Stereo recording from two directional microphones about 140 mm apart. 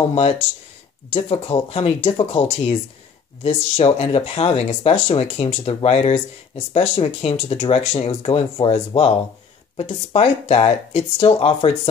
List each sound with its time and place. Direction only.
1.1 s speech: 40° left (ahead or behind)